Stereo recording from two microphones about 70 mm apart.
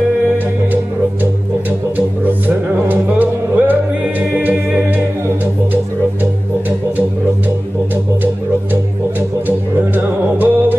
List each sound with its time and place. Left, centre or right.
2.0 s music: right
9.5 s music: right